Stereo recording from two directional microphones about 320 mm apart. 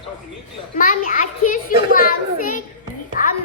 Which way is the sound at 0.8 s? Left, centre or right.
Left.